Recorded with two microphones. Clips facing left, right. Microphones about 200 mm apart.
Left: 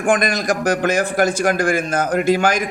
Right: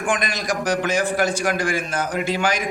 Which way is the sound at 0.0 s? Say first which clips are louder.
Left 6 dB; 50° left (ahead or behind).